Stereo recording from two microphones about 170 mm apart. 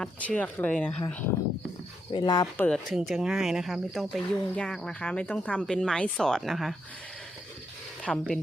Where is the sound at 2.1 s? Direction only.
25° left (ahead or behind).